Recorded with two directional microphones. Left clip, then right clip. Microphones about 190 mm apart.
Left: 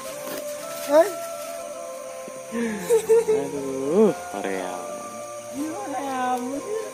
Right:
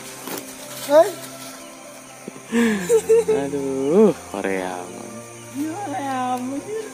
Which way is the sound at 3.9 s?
15° right (ahead or behind).